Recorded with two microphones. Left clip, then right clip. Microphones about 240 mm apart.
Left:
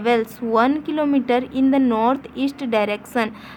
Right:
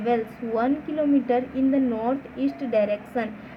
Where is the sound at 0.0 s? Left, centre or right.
Left.